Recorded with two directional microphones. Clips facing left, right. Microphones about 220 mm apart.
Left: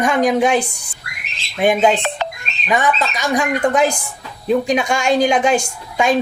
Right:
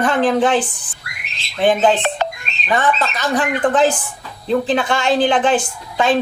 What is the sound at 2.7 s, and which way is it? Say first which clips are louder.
A woman's voice: even; 15° left (ahead or behind).